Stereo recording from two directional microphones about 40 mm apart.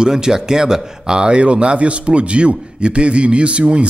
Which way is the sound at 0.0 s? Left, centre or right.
Centre.